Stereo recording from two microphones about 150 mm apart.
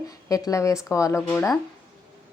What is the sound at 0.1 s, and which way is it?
Speech, 25° left (ahead or behind).